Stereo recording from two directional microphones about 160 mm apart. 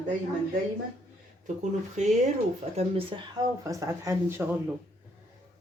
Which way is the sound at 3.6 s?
20° right (ahead or behind).